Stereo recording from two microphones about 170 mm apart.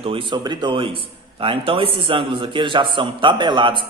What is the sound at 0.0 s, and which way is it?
A man's voice, 30° right (ahead or behind).